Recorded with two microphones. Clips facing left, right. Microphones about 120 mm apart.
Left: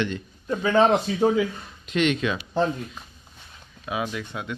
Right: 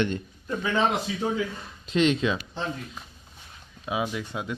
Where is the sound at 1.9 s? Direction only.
30° right (ahead or behind).